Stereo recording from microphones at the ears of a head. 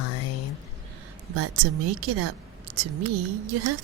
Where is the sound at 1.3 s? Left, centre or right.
Right.